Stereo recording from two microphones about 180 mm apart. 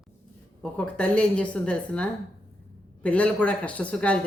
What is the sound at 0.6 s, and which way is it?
Speech, 5° left (ahead or behind).